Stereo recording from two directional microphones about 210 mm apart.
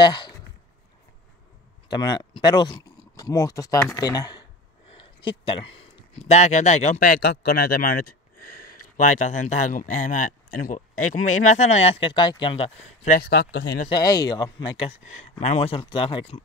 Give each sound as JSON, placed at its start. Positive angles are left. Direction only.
{"t": 0.0, "sound": "a sound", "side_deg": 20}
{"t": 1.9, "sound": "a man's voice", "side_deg": 20}
{"t": 7.2, "sound": "a man's voice", "side_deg": 50}
{"t": 13.2, "sound": "speech", "side_deg": 50}
{"t": 13.8, "sound": "speech", "side_deg": 20}